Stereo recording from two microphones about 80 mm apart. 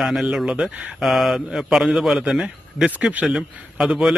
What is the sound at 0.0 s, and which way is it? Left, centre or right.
Speech, centre.